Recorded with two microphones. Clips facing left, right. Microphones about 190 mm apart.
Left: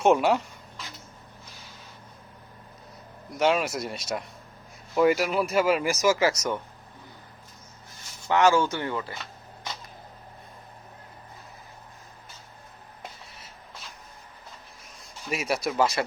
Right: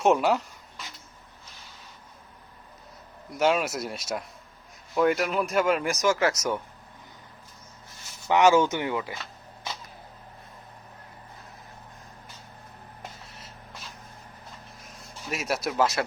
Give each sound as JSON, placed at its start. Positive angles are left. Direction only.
{"t": 0.0, "sound": "speech", "side_deg": 0}
{"t": 3.3, "sound": "speech", "side_deg": 0}
{"t": 8.3, "sound": "speech", "side_deg": -15}
{"t": 15.3, "sound": "speech", "side_deg": 0}